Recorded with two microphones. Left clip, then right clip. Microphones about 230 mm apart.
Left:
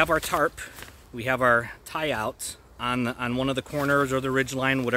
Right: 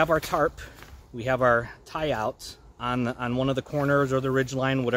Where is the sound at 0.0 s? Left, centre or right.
Centre.